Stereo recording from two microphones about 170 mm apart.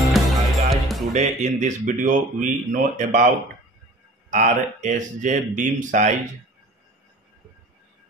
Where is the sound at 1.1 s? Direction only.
45° right (ahead or behind).